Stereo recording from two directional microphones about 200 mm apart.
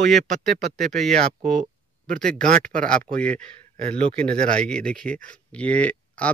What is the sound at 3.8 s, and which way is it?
Speech, 30° right (ahead or behind).